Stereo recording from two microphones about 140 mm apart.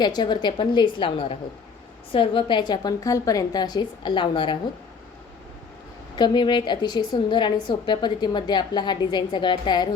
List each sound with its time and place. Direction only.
0.0 s a woman's voice: 30° left (ahead or behind)
6.1 s a woman's voice: 30° left (ahead or behind)